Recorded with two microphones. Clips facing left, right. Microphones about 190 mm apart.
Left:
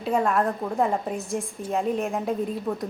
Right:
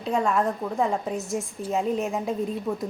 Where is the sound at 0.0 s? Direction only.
5° left (ahead or behind).